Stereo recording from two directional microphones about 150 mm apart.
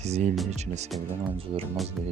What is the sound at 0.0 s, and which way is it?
Speech, 50° right (ahead or behind).